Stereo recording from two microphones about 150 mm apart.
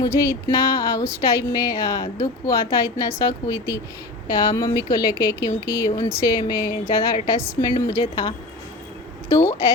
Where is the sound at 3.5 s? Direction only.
20° left (ahead or behind).